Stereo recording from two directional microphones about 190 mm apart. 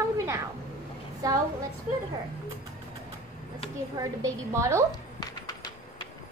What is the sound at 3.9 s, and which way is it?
Speech, 15° right (ahead or behind).